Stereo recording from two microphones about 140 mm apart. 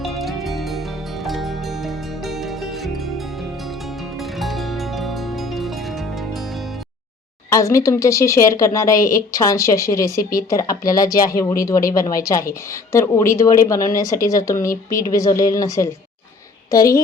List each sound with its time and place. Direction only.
0.0 s music: centre (ahead or behind)
7.5 s speech: 20° left (ahead or behind)